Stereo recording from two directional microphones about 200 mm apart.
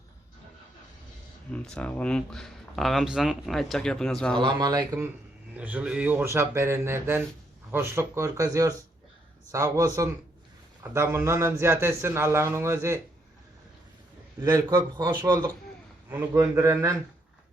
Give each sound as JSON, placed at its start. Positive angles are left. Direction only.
{"t": 1.5, "sound": "speech", "side_deg": 5}
{"t": 4.4, "sound": "speech", "side_deg": -20}
{"t": 5.5, "sound": "a man's voice", "side_deg": -5}
{"t": 14.4, "sound": "a man's voice", "side_deg": -15}